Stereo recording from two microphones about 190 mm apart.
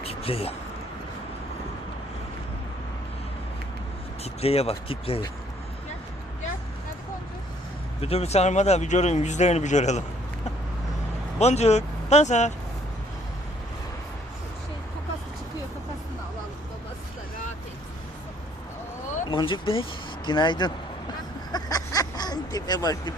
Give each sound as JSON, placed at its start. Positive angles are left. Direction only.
{"t": 0.0, "sound": "a sound", "side_deg": 30}
{"t": 4.2, "sound": "speech", "side_deg": 30}
{"t": 8.0, "sound": "speech", "side_deg": 35}
{"t": 11.3, "sound": "speech", "side_deg": 35}
{"t": 19.3, "sound": "speech", "side_deg": 25}
{"t": 21.5, "sound": "a sound", "side_deg": 20}